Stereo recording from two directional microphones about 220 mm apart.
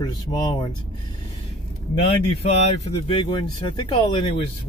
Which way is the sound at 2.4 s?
30° left (ahead or behind).